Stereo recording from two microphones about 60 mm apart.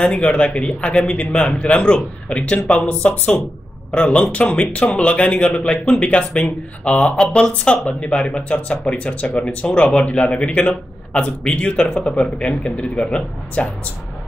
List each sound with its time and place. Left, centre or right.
0.0 s speech: centre